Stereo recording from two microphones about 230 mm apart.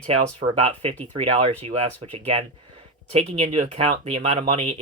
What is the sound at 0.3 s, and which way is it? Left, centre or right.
Speech, right.